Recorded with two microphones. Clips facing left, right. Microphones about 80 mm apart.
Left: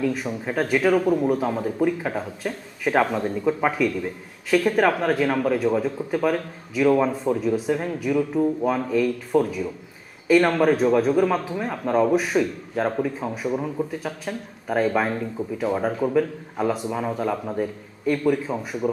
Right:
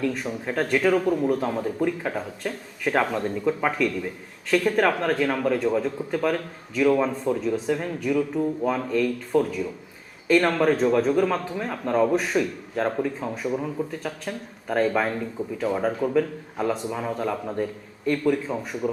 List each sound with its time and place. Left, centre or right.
0.0 s a man's voice: centre